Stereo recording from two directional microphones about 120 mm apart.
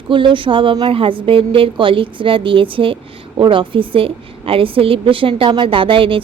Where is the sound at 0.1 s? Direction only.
45° right (ahead or behind).